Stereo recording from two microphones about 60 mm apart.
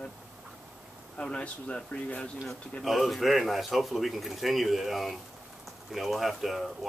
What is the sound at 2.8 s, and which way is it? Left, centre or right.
Speech, centre.